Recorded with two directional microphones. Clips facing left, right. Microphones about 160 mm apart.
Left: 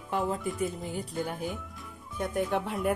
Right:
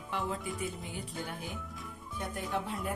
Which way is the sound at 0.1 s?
45° left (ahead or behind).